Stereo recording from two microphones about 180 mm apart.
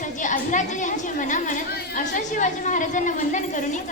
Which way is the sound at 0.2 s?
45° left (ahead or behind).